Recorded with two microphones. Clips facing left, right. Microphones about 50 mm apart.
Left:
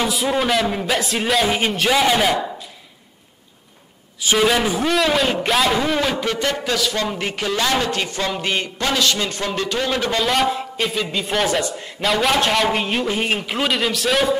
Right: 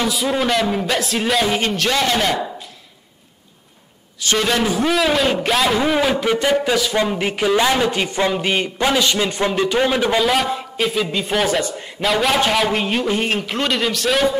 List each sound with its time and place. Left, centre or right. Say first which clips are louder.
0.0 s a man's voice: even; centre
4.2 s a man's voice: left 1 dB; centre